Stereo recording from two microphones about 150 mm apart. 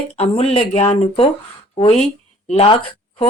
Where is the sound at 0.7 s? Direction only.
45° left (ahead or behind).